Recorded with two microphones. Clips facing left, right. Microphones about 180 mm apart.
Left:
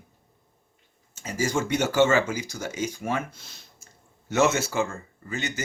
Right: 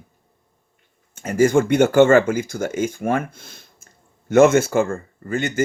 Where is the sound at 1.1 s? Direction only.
55° right (ahead or behind).